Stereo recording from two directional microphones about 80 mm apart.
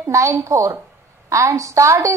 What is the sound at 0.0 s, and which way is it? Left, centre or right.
A woman's voice, right.